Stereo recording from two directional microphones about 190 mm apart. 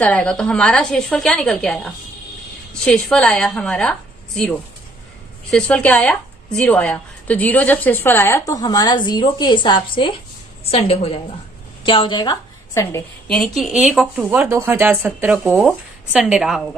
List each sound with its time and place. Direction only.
0.0 s speech: 5° left (ahead or behind)
5.5 s a woman's voice: 5° left (ahead or behind)
13.2 s speech: 5° left (ahead or behind)